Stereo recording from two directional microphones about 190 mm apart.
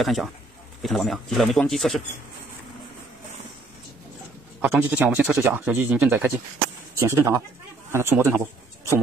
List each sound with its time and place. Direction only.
0.0 s speech: centre (ahead or behind)
4.6 s speech: 10° right (ahead or behind)